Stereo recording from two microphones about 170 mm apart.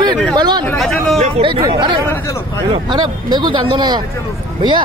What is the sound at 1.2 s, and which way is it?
A man's voice, 30° right (ahead or behind).